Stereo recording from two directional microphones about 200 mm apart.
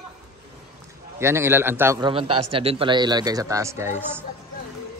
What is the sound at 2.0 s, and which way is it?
A man's voice, 25° right (ahead or behind).